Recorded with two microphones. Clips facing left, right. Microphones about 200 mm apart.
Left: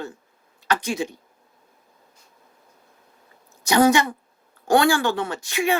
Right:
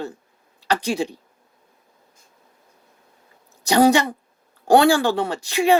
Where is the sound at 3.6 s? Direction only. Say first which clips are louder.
Right 2 dB; 35° right (ahead or behind).